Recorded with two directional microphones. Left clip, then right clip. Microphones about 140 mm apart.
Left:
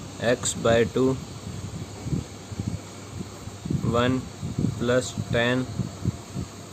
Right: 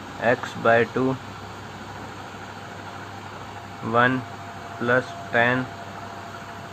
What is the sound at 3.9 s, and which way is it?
Speech, 65° left (ahead or behind).